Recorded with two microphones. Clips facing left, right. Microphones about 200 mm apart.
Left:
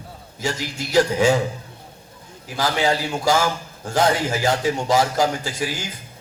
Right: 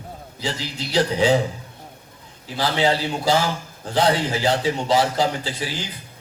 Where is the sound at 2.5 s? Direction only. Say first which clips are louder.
Even; 45° left (ahead or behind).